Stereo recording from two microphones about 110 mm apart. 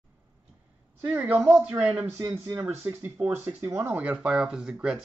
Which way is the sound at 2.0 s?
25° right (ahead or behind).